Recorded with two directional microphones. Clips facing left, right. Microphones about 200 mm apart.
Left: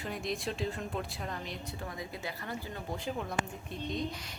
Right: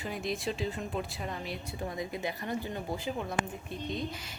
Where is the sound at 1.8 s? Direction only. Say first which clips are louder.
Right 7 dB; 20° right (ahead or behind).